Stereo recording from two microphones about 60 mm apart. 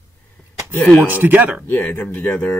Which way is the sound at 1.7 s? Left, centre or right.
Left.